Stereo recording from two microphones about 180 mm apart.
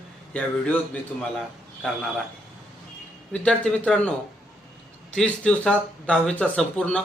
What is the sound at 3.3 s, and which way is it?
Speech, 5° left (ahead or behind).